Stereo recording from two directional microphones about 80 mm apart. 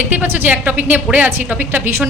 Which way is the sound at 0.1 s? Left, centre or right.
Right.